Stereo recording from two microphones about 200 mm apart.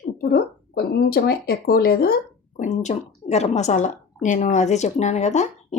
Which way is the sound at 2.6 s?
35° left (ahead or behind).